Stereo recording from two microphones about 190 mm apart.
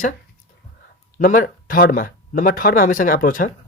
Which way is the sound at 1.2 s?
45° left (ahead or behind).